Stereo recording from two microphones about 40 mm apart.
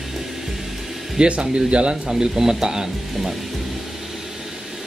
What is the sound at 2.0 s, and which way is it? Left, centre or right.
Speech, centre.